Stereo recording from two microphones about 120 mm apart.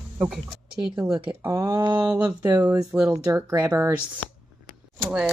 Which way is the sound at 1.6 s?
40° right (ahead or behind).